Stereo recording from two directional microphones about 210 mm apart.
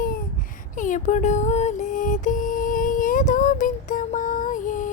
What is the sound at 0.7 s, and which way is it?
Music, 40° left (ahead or behind).